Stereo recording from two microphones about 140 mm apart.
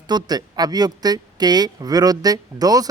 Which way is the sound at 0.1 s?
30° right (ahead or behind).